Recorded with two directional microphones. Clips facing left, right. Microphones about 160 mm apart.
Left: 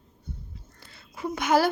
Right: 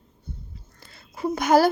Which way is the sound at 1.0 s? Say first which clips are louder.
Right 5 dB; 40° right (ahead or behind).